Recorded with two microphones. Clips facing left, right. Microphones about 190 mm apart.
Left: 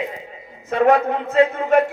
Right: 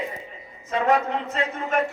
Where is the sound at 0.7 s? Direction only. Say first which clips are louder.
Left 6 dB; 65° left (ahead or behind).